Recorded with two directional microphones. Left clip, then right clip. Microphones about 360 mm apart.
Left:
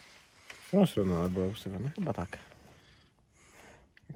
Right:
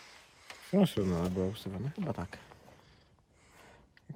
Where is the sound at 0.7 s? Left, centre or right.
Centre.